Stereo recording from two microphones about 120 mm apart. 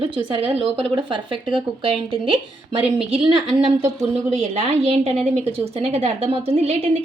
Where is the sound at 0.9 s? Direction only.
40° right (ahead or behind).